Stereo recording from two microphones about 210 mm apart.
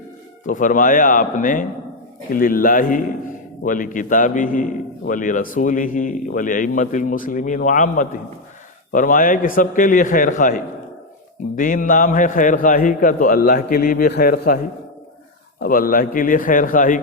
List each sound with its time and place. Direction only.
0.4 s a man's voice: 40° left (ahead or behind)
15.6 s a man's voice: 45° left (ahead or behind)